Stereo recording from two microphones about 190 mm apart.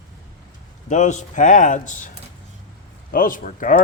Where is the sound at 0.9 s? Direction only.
40° left (ahead or behind).